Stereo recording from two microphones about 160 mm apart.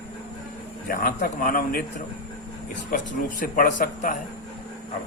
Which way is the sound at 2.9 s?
60° left (ahead or behind).